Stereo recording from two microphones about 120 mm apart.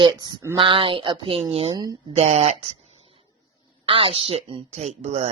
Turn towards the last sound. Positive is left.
turn(degrees=-65)  # may be behind; listen again after turning